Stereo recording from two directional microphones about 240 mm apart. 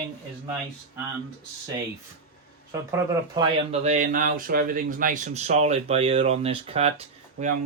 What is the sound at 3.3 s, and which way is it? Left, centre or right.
Speech, right.